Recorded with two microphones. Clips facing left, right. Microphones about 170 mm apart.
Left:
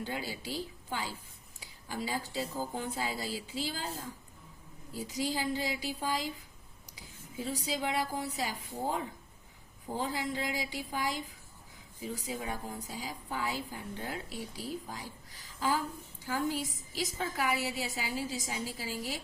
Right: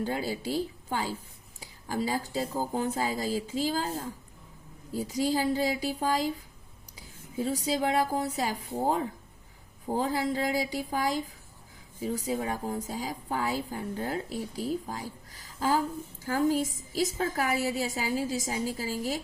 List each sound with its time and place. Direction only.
0.0 s a woman's voice: 40° right (ahead or behind)
7.4 s a woman's voice: 40° right (ahead or behind)